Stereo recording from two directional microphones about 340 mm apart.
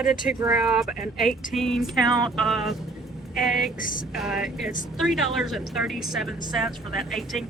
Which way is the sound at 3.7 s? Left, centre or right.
Left.